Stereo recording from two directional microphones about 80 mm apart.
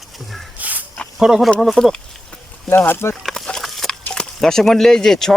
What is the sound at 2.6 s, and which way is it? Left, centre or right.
Speech, left.